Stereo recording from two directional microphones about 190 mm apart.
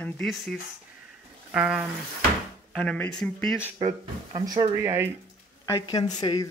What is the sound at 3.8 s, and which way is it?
Speech, 25° right (ahead or behind).